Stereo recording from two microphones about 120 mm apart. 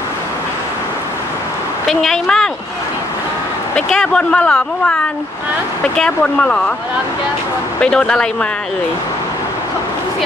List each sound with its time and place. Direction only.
1.9 s a woman's voice: 5° left (ahead or behind)
3.7 s speech: 5° left (ahead or behind)
7.8 s speech: 5° left (ahead or behind)